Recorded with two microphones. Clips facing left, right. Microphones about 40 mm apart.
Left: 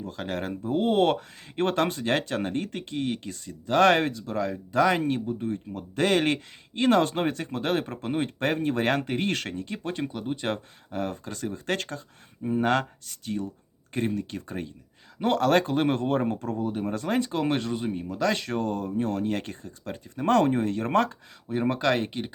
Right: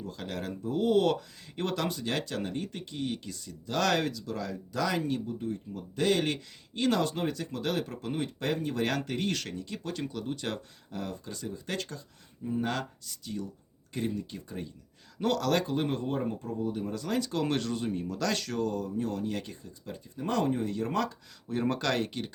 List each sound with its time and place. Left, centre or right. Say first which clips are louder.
0.0 s speech: left 5 dB; left
15.2 s speech: left 6 dB; left
21.4 s speech: left 5 dB; centre